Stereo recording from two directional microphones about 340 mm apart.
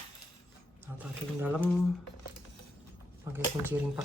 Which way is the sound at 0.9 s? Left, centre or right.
Centre.